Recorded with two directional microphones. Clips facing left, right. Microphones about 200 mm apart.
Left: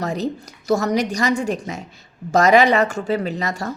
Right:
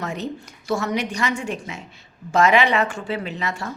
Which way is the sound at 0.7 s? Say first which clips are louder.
Left 5 dB; 40° left (ahead or behind).